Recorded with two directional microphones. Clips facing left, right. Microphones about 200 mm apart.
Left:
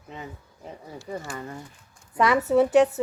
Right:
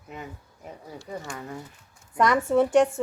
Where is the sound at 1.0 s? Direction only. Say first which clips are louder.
Left 2 dB; 5° left (ahead or behind).